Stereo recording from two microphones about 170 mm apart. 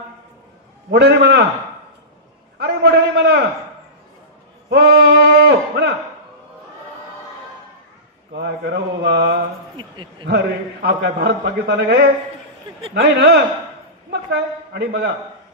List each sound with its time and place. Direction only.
0.9 s mantra: 80° right
2.6 s a sound: 80° right
4.6 s bleat: 75° right (ahead or behind)
8.4 s mantra: 85° right
10.2 s a man's voice: 75° right (ahead or behind)
12.9 s mantra: 80° right
14.1 s a man's voice: 75° right (ahead or behind)